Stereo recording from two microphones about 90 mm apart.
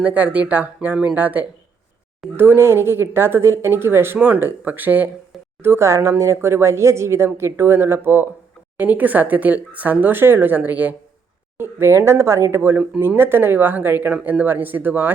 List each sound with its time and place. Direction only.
0.0 s speech: 15° right (ahead or behind)